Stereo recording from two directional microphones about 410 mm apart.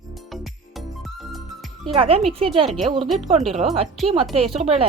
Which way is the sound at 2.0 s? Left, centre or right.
Centre.